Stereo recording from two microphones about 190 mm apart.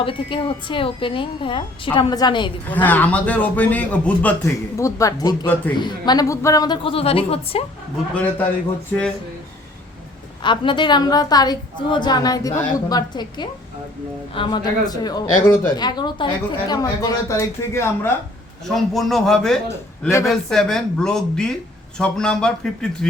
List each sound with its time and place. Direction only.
0.0 s speech: 25° left (ahead or behind)
2.6 s a man's voice: 10° left (ahead or behind); by 7.6 s 30° left (ahead or behind)
8.1 s a man's voice: 10° left (ahead or behind)
10.4 s speech: 25° left (ahead or behind)
18.7 s speech: centre (ahead or behind)